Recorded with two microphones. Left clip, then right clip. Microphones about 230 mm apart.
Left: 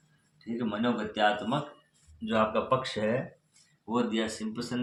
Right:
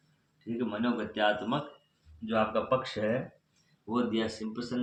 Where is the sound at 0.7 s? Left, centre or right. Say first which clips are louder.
Left 4 dB; left.